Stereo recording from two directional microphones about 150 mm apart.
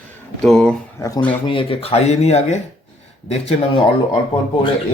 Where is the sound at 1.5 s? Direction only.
35° left (ahead or behind).